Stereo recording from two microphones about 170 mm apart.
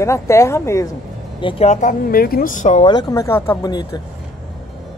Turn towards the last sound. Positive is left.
turn(degrees=25)  # may be behind; listen again after turning